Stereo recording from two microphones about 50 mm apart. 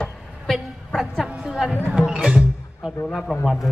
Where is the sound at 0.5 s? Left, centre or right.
Centre.